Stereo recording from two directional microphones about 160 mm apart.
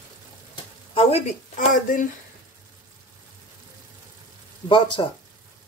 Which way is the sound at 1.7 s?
55° left (ahead or behind).